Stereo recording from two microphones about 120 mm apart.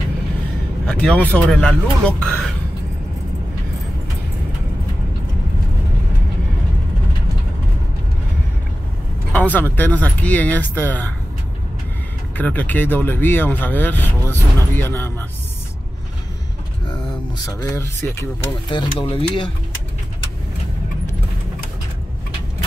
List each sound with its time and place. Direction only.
0.8 s speech: 10° left (ahead or behind)
9.3 s speech: 15° left (ahead or behind)
12.4 s speech: 15° left (ahead or behind)
17.5 s speech: 25° left (ahead or behind)
18.7 s speech: 45° left (ahead or behind)